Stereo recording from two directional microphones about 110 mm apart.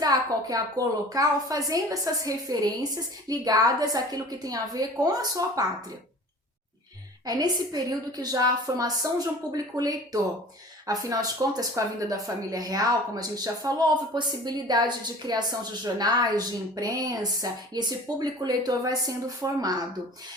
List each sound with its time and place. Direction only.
0.0 s a sound: 35° right (ahead or behind)
1.1 s speech: 35° right (ahead or behind)
7.3 s speech: 35° right (ahead or behind)